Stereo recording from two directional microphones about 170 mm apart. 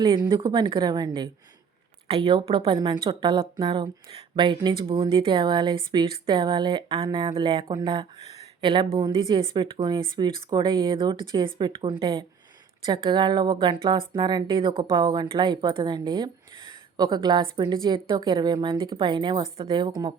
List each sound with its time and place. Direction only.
0.0 s speech: 25° right (ahead or behind)